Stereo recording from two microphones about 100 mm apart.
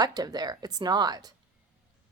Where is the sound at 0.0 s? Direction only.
40° right (ahead or behind).